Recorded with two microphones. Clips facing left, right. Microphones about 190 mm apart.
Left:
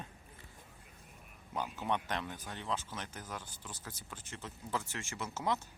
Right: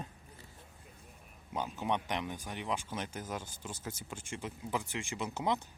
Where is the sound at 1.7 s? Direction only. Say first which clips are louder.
Right 2 dB; 15° right (ahead or behind).